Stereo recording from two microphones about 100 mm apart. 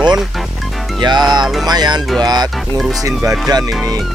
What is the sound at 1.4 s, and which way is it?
Music, centre (ahead or behind).